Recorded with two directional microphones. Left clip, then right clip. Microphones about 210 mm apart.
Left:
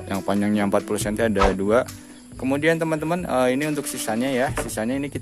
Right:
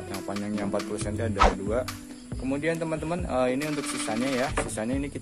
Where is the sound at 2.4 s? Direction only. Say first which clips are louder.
Left 8 dB; 35° left (ahead or behind).